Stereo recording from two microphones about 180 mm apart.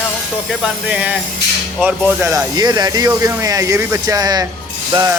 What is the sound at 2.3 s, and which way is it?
Speech, 20° right (ahead or behind).